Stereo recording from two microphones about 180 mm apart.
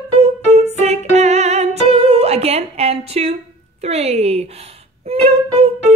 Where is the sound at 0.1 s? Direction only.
35° right (ahead or behind).